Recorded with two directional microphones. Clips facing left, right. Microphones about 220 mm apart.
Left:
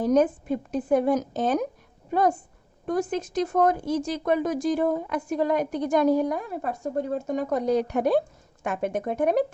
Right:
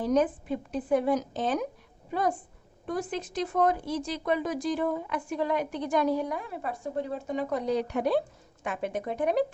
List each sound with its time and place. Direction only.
0.0 s speech: 45° left (ahead or behind)